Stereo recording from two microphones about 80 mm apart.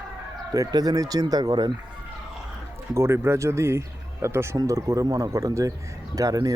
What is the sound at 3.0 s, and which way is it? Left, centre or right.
Speech, right.